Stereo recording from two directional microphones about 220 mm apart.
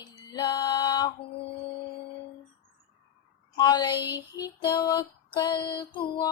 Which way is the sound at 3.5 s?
20° left (ahead or behind).